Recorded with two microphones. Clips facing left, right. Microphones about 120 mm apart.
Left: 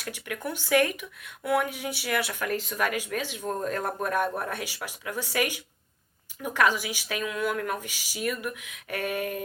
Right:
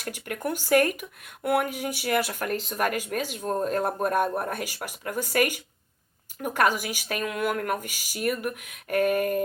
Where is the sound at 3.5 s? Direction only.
35° right (ahead or behind).